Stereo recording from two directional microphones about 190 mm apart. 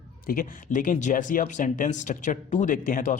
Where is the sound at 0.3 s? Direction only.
45° left (ahead or behind).